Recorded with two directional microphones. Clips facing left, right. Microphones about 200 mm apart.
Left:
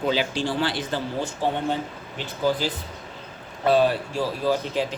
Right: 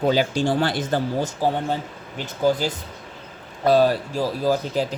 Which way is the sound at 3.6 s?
40° right (ahead or behind).